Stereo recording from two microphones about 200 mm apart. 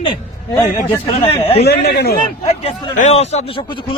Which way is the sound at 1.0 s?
30° left (ahead or behind).